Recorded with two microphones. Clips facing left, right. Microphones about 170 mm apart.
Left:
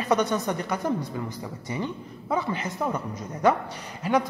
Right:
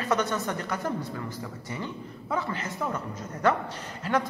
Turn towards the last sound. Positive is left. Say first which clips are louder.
# left 3 dB
turn(degrees=15)  # may be behind; listen again after turning